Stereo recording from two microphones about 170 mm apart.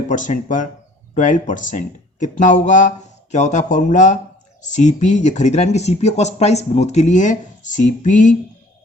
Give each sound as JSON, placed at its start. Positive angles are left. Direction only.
{"t": 0.1, "sound": "speech", "side_deg": 50}